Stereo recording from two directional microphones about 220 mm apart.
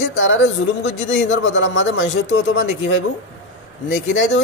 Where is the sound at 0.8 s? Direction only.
55° left (ahead or behind).